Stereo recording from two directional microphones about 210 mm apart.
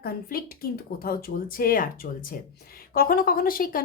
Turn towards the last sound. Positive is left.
turn(degrees=45)  # may be behind; listen again after turning